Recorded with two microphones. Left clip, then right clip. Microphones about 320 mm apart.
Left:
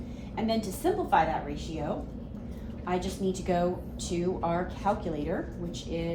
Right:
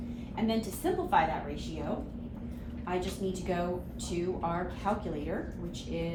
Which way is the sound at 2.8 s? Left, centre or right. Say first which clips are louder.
Left 3 dB; left.